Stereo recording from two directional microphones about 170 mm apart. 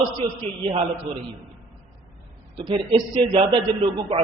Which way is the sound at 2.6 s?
30° right (ahead or behind).